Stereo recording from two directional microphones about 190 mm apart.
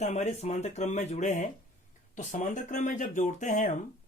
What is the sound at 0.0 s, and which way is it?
Speech, 35° left (ahead or behind).